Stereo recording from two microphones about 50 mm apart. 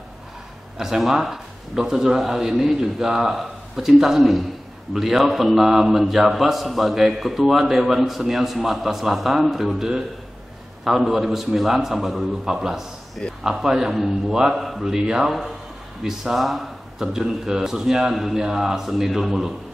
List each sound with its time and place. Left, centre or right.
0.7 s a man's voice: centre